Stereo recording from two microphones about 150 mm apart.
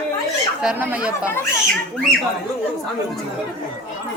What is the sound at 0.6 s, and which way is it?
Speech, 10° right (ahead or behind).